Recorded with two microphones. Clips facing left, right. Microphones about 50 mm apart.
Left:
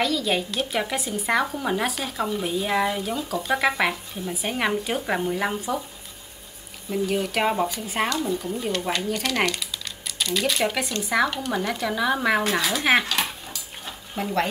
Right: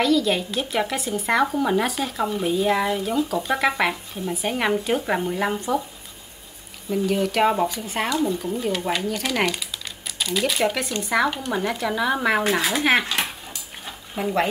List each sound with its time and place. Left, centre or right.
0.0 s speech: centre
6.9 s speech: centre
13.1 s dog: right
13.8 s a sound: centre